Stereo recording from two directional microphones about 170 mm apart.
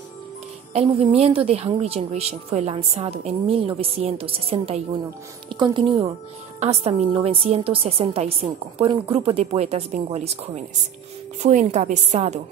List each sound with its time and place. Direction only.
0.7 s a woman's voice: 35° right (ahead or behind)